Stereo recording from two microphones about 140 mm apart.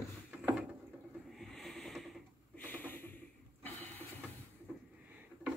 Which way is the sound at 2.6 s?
15° left (ahead or behind).